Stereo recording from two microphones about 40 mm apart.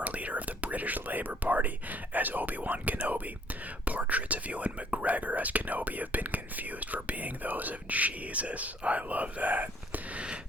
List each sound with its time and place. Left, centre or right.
0.0 s speech: right